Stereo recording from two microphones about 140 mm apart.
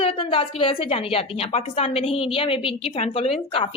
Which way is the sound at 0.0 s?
40° left (ahead or behind).